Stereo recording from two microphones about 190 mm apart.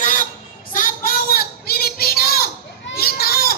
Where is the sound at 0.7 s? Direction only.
45° left (ahead or behind).